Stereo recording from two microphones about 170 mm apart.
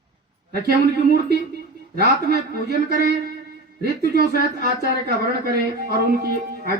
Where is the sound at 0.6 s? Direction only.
70° right (ahead or behind).